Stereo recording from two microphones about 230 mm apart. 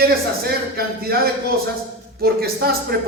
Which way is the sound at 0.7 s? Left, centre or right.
Right.